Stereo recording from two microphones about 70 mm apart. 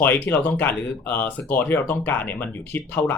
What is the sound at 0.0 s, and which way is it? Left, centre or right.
Speech, left.